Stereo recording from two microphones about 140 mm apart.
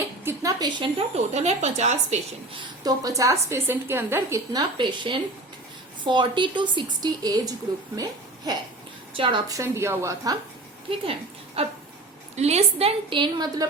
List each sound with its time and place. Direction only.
0.3 s a woman's voice: 25° right (ahead or behind)
0.8 s speech: 45° right (ahead or behind)
2.8 s a woman's voice: 25° right (ahead or behind)
4.5 s a woman's voice: 35° right (ahead or behind)
9.5 s a woman's voice: 20° right (ahead or behind)
11.0 s a woman's voice: 40° right (ahead or behind)
13.1 s a woman's voice: 35° right (ahead or behind)